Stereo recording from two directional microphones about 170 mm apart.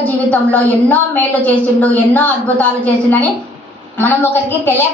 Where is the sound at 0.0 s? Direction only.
10° left (ahead or behind).